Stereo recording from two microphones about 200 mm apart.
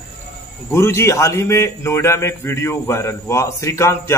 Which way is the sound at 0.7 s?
15° left (ahead or behind).